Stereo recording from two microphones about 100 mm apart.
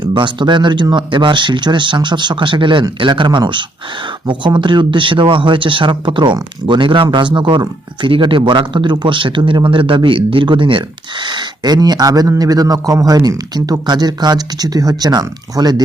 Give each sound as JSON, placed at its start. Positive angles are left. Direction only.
{"t": 0.0, "sound": "speech", "side_deg": -55}